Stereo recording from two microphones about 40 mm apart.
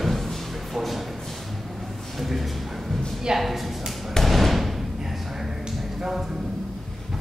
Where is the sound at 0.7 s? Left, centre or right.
Centre.